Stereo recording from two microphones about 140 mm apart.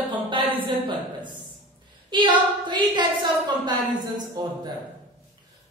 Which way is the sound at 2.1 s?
35° right (ahead or behind).